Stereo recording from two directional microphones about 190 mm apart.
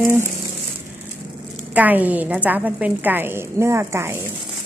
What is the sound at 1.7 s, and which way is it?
A woman's voice, 10° right (ahead or behind).